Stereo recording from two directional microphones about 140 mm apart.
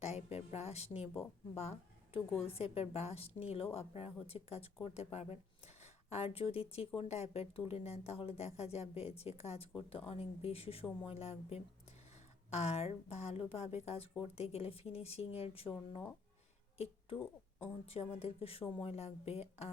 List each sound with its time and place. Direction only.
0.0 s speech: 50° left (ahead or behind)
16.7 s a sound: 45° left (ahead or behind)
17.6 s speech: 45° left (ahead or behind)